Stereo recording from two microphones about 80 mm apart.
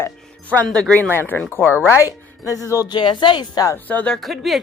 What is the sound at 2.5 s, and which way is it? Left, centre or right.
Speech, left.